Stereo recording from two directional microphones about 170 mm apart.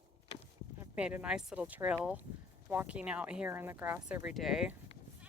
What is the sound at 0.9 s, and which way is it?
Speech, 5° right (ahead or behind).